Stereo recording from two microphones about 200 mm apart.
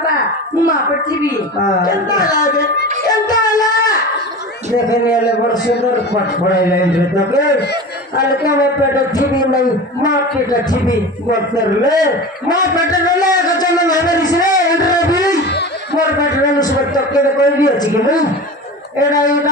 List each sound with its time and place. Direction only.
2.0 s speech: 20° left (ahead or behind)
11.5 s speech: 20° left (ahead or behind)
14.5 s a sound: 20° left (ahead or behind)
17.1 s speech: 20° left (ahead or behind)